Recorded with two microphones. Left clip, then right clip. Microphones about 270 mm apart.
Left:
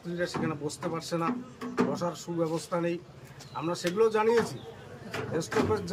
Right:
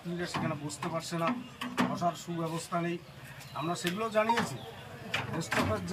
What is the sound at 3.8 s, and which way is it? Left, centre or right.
Speech, centre.